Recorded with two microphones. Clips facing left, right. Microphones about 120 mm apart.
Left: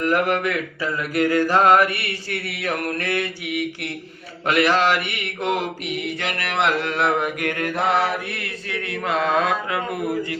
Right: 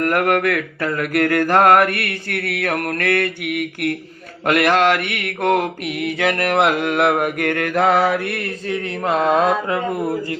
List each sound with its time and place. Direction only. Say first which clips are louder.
0.0 s mantra: right 3 dB; 55° right (ahead or behind); by 8.4 s 85° right
8.4 s mantra: right 6 dB; 35° right (ahead or behind)